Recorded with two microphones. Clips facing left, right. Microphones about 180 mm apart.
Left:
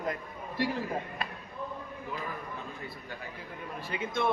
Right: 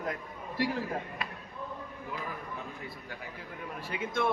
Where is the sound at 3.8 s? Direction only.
5° right (ahead or behind).